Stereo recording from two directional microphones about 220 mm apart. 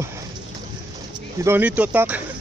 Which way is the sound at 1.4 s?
10° right (ahead or behind).